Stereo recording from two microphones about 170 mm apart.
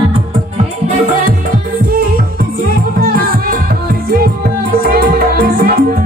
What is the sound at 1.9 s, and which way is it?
Music, 60° right (ahead or behind).